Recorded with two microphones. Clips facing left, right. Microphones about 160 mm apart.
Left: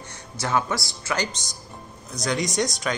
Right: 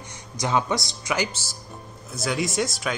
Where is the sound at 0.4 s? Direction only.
15° right (ahead or behind).